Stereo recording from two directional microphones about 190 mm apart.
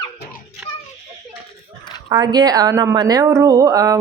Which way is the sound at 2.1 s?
20° right (ahead or behind).